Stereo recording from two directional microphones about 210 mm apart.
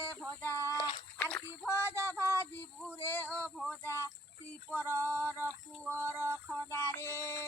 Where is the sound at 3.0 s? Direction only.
10° left (ahead or behind).